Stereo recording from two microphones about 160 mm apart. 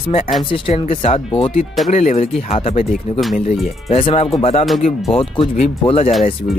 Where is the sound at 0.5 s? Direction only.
35° left (ahead or behind).